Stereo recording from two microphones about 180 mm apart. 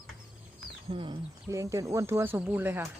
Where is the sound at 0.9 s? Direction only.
30° right (ahead or behind).